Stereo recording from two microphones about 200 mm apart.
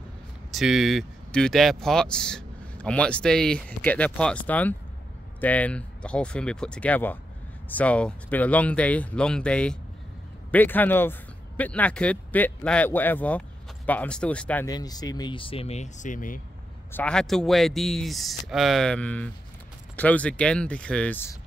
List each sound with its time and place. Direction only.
0.5 s speech: centre (ahead or behind)
14.7 s speech: 20° left (ahead or behind); by 16.3 s 40° left (ahead or behind)
16.9 s speech: 5° left (ahead or behind)